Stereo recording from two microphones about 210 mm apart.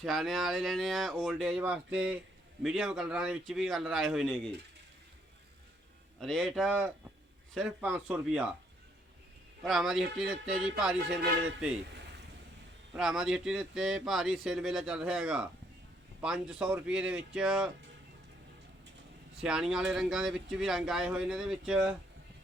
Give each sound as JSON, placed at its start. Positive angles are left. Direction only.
{"t": 0.0, "sound": "speech", "side_deg": 0}
{"t": 6.1, "sound": "speech", "side_deg": 0}
{"t": 9.6, "sound": "speech", "side_deg": 0}
{"t": 11.9, "sound": "boat", "side_deg": -55}
{"t": 12.9, "sound": "speech", "side_deg": -5}
{"t": 19.4, "sound": "speech", "side_deg": -5}